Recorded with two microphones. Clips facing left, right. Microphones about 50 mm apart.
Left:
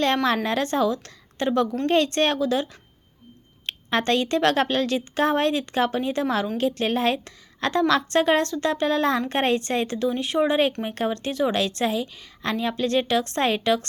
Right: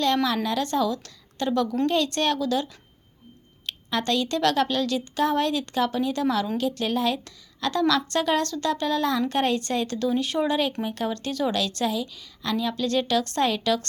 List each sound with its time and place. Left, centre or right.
0.0 s a woman's voice: left
3.7 s a woman's voice: left; by 10.6 s centre
10.8 s a woman's voice: left